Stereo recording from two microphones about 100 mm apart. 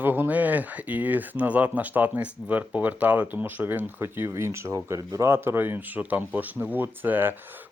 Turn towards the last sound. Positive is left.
turn(degrees=-20)  # may be behind; listen again after turning